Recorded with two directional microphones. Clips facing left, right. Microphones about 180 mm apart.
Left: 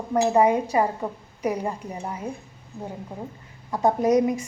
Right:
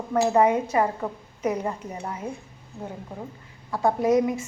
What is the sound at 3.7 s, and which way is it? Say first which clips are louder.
Speech: left 1 dB; 20° left (ahead or behind).